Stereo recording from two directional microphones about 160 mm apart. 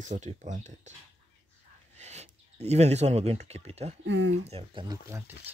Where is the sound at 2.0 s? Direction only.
45° right (ahead or behind).